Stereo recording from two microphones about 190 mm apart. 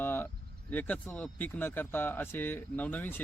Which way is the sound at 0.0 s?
10° left (ahead or behind).